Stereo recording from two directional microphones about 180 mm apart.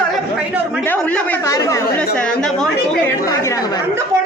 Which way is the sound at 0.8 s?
10° left (ahead or behind).